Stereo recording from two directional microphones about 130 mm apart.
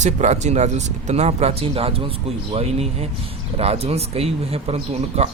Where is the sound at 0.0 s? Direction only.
65° right (ahead or behind).